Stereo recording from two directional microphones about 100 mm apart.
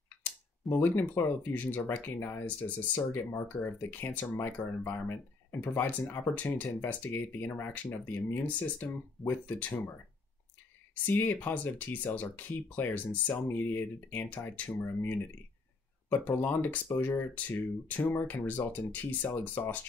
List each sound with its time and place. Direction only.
0.2 s speech: 20° left (ahead or behind)
11.1 s speech: 20° left (ahead or behind)